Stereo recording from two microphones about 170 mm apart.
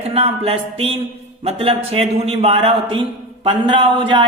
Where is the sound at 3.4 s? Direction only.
30° right (ahead or behind).